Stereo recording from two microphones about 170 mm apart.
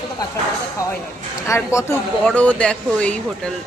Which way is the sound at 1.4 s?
15° left (ahead or behind).